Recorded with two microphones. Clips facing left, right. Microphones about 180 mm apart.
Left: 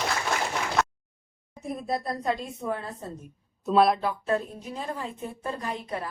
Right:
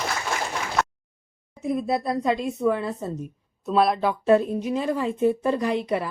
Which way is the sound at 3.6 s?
Centre (ahead or behind).